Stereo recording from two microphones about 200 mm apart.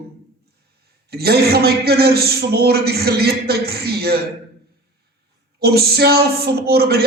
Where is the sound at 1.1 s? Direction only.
50° right (ahead or behind).